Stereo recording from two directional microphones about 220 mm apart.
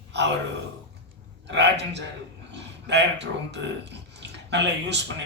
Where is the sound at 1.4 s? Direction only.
50° right (ahead or behind).